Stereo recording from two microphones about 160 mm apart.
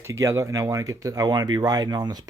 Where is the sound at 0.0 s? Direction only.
20° right (ahead or behind).